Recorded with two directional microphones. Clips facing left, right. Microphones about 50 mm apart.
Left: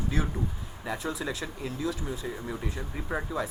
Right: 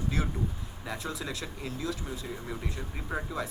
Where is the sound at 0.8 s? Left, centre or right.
Centre.